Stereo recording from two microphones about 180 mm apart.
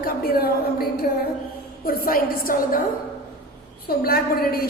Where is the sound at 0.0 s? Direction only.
55° left (ahead or behind).